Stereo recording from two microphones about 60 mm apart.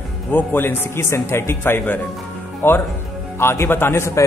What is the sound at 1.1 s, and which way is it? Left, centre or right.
Speech, left.